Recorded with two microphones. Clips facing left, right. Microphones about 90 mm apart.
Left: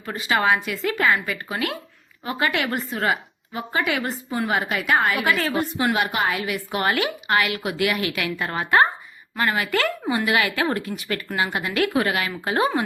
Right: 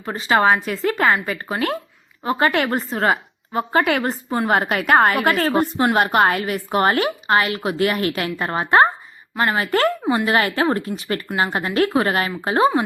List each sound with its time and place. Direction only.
0.0 s a woman's voice: 30° right (ahead or behind)